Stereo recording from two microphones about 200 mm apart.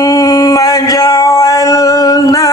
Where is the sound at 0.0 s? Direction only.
20° left (ahead or behind).